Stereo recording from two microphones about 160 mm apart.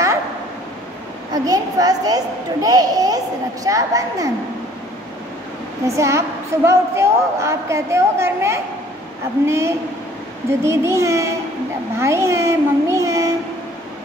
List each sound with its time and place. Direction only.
1.3 s a child's voice: 25° right (ahead or behind)
5.9 s a woman's voice: 20° right (ahead or behind)